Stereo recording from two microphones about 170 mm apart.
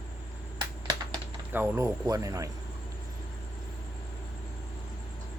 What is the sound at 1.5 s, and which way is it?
Speech, 10° right (ahead or behind).